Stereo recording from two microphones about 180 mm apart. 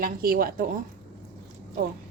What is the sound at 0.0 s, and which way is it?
Speech, 55° right (ahead or behind).